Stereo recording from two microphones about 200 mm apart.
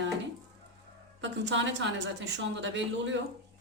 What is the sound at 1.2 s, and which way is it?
A woman's voice, 65° right (ahead or behind).